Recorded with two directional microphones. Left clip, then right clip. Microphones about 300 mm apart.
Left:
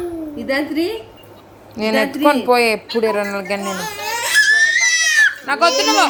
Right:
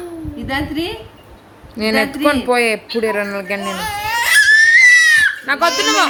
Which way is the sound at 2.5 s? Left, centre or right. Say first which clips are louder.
Left 1 dB; centre.